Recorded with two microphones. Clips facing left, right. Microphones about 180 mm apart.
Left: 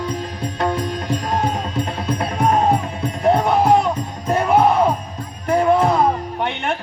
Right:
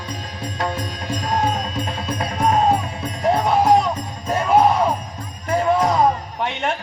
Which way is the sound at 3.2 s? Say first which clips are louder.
Left 1 dB; 60° left (ahead or behind).